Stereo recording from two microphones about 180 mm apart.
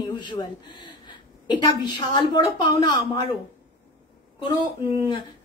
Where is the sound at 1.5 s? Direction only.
25° left (ahead or behind).